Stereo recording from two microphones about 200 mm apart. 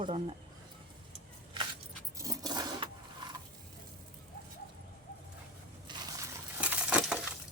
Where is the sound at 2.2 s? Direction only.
20° right (ahead or behind).